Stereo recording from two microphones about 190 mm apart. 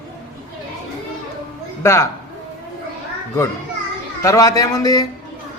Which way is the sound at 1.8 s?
15° left (ahead or behind).